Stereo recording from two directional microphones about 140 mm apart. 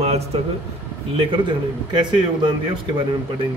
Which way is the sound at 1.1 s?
35° right (ahead or behind).